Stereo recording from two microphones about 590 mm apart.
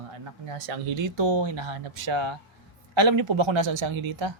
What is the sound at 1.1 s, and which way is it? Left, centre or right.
A man's voice, right.